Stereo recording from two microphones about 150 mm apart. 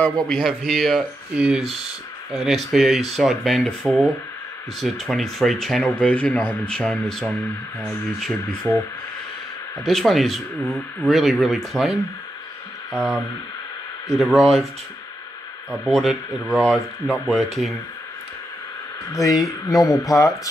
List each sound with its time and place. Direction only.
0.3 s speech: centre (ahead or behind)
9.8 s speech: centre (ahead or behind)
15.7 s speech: centre (ahead or behind)
19.1 s speech: 20° left (ahead or behind)